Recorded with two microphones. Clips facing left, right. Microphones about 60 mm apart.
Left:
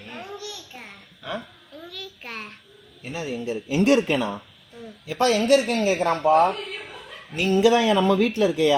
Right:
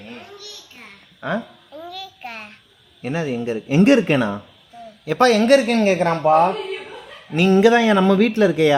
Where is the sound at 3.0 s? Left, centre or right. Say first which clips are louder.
Right 7 dB; right.